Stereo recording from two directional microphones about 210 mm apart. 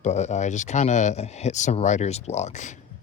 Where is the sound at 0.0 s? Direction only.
35° left (ahead or behind).